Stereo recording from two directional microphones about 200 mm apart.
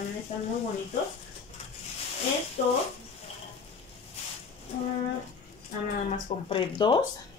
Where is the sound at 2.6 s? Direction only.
40° left (ahead or behind).